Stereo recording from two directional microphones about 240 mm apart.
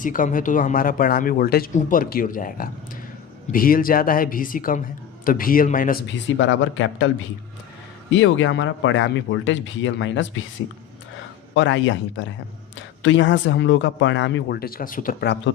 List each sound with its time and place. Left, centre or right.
0.0 s speech: left
8.1 s speech: left
11.5 s speech: left